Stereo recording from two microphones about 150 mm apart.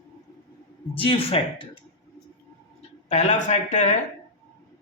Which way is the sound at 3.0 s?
50° left (ahead or behind).